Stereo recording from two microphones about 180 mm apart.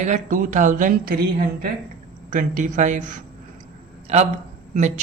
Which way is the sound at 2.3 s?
45° right (ahead or behind).